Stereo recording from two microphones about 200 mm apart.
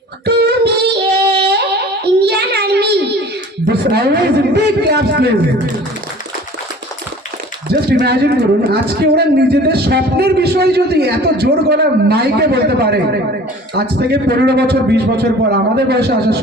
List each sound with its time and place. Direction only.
0.3 s music: 55° right (ahead or behind)
2.2 s a sound: 55° right (ahead or behind)
3.7 s a man's voice: 55° right (ahead or behind)
7.7 s speech: 55° right (ahead or behind)